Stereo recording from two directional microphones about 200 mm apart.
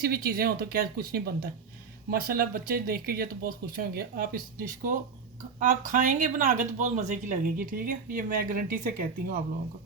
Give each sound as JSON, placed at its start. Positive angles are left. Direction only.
{"t": 0.0, "sound": "speech", "side_deg": -50}